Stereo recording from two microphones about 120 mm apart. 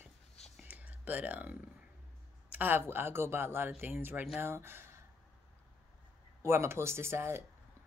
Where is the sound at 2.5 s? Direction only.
15° right (ahead or behind).